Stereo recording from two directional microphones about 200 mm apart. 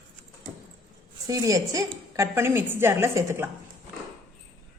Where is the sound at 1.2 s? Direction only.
20° right (ahead or behind).